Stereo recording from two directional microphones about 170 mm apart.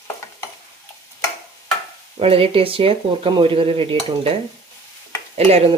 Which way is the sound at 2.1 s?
35° right (ahead or behind).